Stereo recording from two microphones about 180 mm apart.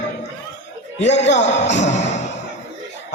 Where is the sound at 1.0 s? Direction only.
40° left (ahead or behind).